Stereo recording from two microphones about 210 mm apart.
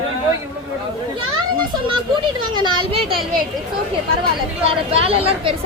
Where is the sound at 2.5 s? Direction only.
20° right (ahead or behind).